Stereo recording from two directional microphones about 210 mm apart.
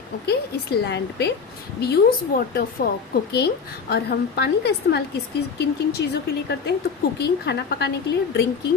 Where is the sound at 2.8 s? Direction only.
50° left (ahead or behind).